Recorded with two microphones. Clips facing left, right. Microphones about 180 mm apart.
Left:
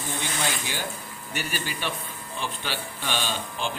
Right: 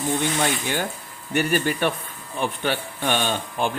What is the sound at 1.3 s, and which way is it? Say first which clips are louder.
Speech: right 11 dB; 55° right (ahead or behind).